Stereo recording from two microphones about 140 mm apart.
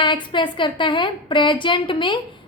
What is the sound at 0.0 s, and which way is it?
A woman's voice, 35° left (ahead or behind).